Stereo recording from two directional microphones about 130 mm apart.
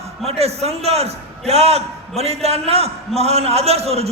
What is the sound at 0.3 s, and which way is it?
A man's voice, 50° right (ahead or behind).